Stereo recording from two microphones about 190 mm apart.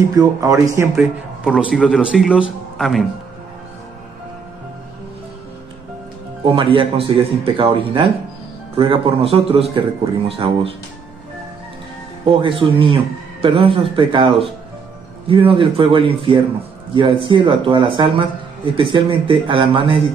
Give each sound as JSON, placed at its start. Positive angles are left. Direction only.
{"t": 0.1, "sound": "speech", "side_deg": -20}
{"t": 1.4, "sound": "speech", "side_deg": -5}
{"t": 6.4, "sound": "speech", "side_deg": -25}
{"t": 12.3, "sound": "speech", "side_deg": -25}